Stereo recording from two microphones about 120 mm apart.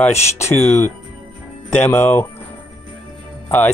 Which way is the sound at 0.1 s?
70° left (ahead or behind).